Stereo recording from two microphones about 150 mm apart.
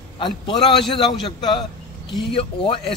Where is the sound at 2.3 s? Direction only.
35° left (ahead or behind).